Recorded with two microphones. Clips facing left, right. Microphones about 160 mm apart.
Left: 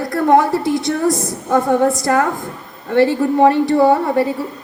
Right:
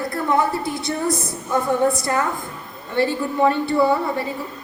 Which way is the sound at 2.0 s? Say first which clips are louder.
Left 6 dB; 75° left (ahead or behind).